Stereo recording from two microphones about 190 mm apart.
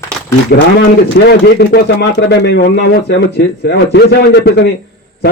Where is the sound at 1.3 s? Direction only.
60° left (ahead or behind).